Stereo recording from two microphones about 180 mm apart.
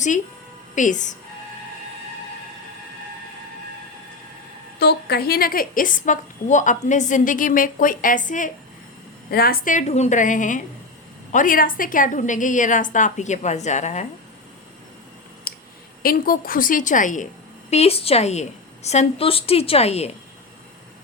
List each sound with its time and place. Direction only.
0.8 s a woman's voice: 45° left (ahead or behind)
4.8 s a woman's voice: 65° left (ahead or behind); by 8.4 s 45° left (ahead or behind)
9.3 s a woman's voice: 55° left (ahead or behind); by 14.1 s 40° left (ahead or behind)
15.5 s clicking: 55° left (ahead or behind)
16.0 s a woman's voice: 55° left (ahead or behind)
17.7 s a woman's voice: 35° left (ahead or behind)